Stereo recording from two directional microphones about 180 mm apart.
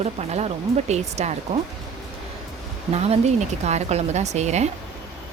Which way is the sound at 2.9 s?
35° right (ahead or behind).